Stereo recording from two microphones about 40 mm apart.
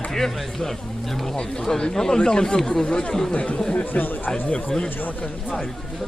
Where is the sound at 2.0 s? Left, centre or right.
Centre.